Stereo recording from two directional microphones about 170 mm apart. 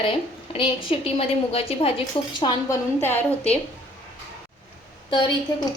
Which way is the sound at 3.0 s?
10° left (ahead or behind).